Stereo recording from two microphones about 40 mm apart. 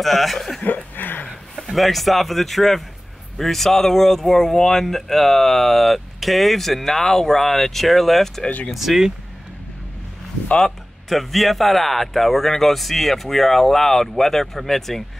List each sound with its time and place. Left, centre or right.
0.0 s speech: centre
0.7 s a sound: left
1.7 s speech: centre
8.5 s speech: left
8.7 s speech: centre
10.6 s speech: centre